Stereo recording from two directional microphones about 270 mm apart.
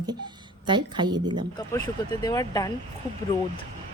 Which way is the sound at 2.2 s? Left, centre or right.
Centre.